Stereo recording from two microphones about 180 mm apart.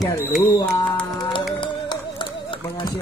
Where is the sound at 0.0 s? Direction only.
15° left (ahead or behind).